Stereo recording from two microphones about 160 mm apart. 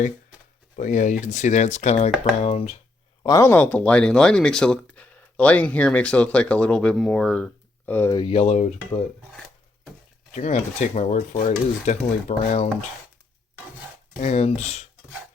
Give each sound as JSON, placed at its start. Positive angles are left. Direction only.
{"t": 0.8, "sound": "stir", "side_deg": 50}
{"t": 2.4, "sound": "speech", "side_deg": 40}
{"t": 3.2, "sound": "speech", "side_deg": 15}
{"t": 8.1, "sound": "speech", "side_deg": 30}
{"t": 10.3, "sound": "stir", "side_deg": 45}
{"t": 14.2, "sound": "stir", "side_deg": 45}